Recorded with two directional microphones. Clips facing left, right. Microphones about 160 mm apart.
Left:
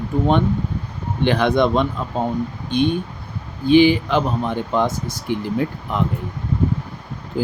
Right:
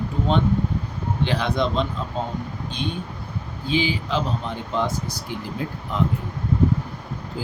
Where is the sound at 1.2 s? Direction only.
55° left (ahead or behind).